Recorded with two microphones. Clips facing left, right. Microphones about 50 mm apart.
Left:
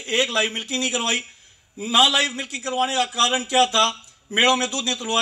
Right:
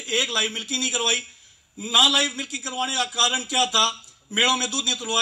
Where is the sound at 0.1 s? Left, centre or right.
Left.